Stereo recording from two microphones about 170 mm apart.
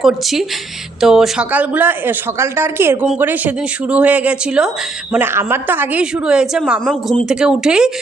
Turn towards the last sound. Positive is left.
turn(degrees=-5)  # may be behind; listen again after turning